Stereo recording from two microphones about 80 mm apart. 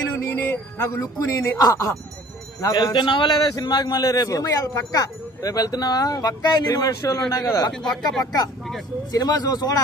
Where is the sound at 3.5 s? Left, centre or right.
Left.